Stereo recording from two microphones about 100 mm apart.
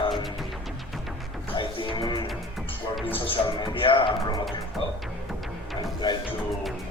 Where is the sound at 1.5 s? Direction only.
60° left (ahead or behind).